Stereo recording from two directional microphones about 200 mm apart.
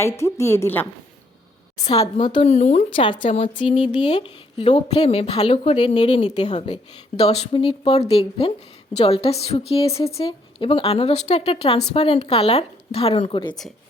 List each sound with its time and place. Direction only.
0.0 s a woman's voice: 15° left (ahead or behind)
2.2 s speech: 30° left (ahead or behind)
3.0 s speech: 25° left (ahead or behind)